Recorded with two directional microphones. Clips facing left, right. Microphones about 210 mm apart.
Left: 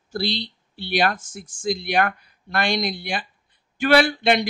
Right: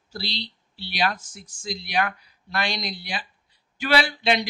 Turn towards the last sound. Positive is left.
turn(degrees=50)  # may be behind; listen again after turning